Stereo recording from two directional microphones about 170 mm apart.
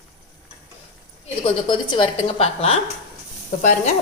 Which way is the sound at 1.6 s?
25° left (ahead or behind).